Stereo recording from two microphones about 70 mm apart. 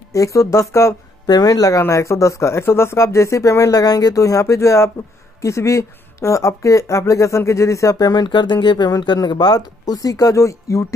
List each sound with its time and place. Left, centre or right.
0.1 s speech: left
1.2 s speech: left
3.8 s speech: left